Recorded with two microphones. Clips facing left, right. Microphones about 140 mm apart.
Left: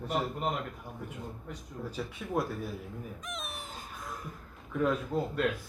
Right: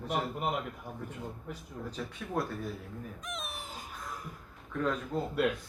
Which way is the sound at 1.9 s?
5° left (ahead or behind).